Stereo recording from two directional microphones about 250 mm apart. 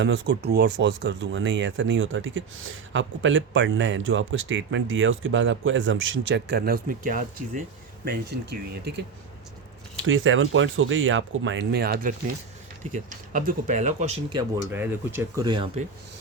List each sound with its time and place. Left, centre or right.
0.0 s speech: right
10.1 s speech: right
14.7 s speech: centre